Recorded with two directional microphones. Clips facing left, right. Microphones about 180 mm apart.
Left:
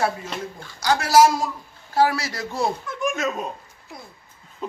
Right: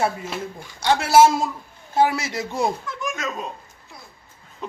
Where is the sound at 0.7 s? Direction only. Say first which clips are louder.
Right 1 dB; 25° right (ahead or behind).